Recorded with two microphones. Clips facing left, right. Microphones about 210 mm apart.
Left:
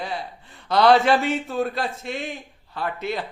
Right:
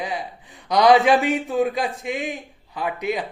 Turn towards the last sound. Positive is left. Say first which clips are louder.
# right 3 dB
turn(degrees=-15)  # may be behind; listen again after turning